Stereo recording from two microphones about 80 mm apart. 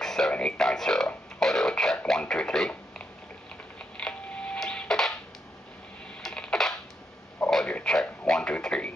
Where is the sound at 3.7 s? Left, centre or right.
Centre.